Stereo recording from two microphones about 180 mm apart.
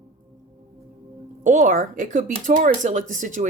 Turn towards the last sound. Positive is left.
turn(degrees=-45)  # may be behind; listen again after turning